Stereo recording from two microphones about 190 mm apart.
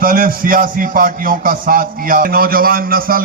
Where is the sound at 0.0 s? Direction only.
50° right (ahead or behind).